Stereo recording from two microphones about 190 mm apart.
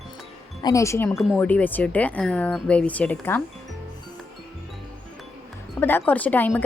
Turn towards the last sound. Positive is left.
turn(degrees=10)  # may be behind; listen again after turning